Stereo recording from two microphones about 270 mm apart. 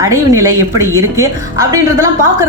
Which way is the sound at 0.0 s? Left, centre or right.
Centre.